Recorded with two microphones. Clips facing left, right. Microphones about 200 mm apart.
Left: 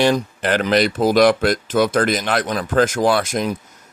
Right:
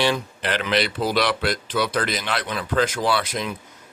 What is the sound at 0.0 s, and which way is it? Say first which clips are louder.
Speech: left 6 dB; 45° left (ahead or behind).